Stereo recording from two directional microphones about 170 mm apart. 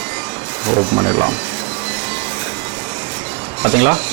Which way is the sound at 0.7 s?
25° right (ahead or behind).